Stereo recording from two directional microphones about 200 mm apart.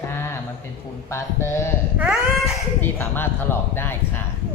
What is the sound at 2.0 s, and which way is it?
Speech, 5° right (ahead or behind).